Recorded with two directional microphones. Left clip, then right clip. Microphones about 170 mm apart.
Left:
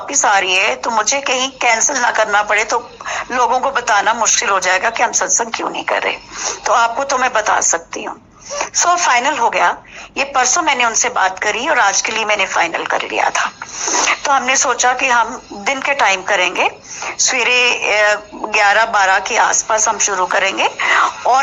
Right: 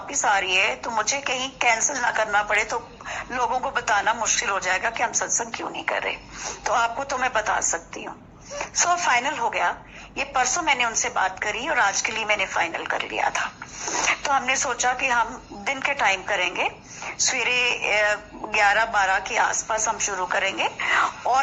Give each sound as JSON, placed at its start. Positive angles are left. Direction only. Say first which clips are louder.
{"t": 0.1, "sound": "a woman's voice", "louder": "left 8 dB", "side_deg": 30}